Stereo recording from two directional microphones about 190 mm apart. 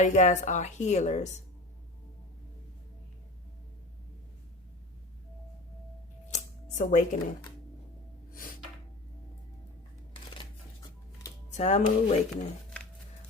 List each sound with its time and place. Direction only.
0.0 s a woman's voice: 40° left (ahead or behind)
6.3 s a sound: 40° left (ahead or behind)
8.3 s gasp: 50° left (ahead or behind)
11.5 s a woman's voice: 35° left (ahead or behind)